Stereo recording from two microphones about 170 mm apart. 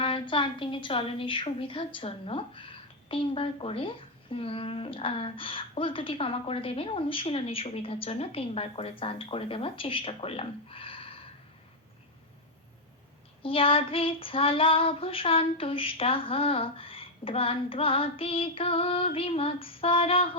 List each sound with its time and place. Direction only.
0.0 s a woman's voice: 30° left (ahead or behind)
13.4 s a woman's voice: 30° left (ahead or behind)